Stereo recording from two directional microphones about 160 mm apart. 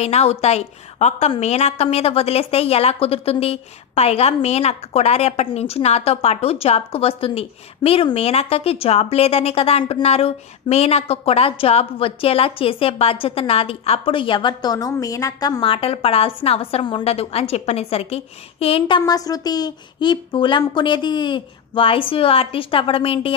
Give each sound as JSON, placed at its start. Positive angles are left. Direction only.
{"t": 0.0, "sound": "a woman's voice", "side_deg": 40}
{"t": 15.6, "sound": "a woman's voice", "side_deg": 35}